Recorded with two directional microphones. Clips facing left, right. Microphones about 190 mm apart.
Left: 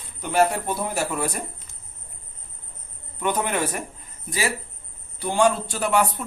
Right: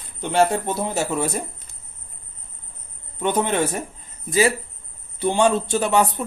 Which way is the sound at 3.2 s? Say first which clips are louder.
Right 4 dB; 25° right (ahead or behind).